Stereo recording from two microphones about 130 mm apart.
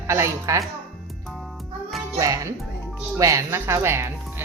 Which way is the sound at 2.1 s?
25° right (ahead or behind).